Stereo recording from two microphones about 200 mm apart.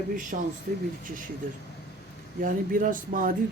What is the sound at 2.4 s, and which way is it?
Speech, 45° right (ahead or behind).